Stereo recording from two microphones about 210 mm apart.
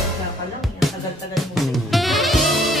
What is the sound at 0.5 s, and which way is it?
Music, centre (ahead or behind).